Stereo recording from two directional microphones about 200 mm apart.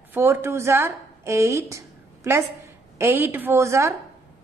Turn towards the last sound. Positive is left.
turn(degrees=-15)  # may be behind; listen again after turning